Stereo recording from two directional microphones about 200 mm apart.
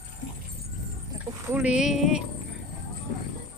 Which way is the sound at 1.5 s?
5° right (ahead or behind).